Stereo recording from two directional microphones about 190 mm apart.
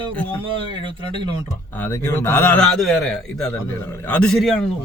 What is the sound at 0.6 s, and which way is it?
Speech, 25° right (ahead or behind).